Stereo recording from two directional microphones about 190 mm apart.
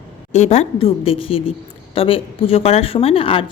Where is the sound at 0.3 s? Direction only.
35° left (ahead or behind).